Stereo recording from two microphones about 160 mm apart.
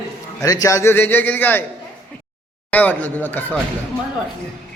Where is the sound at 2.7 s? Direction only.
10° left (ahead or behind).